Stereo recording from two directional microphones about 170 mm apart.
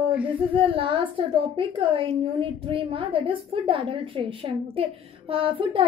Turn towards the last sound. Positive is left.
turn(degrees=-30)  # may be behind; listen again after turning